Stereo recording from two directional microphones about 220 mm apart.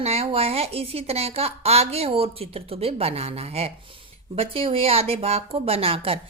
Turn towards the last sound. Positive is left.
turn(degrees=-25)  # may be behind; listen again after turning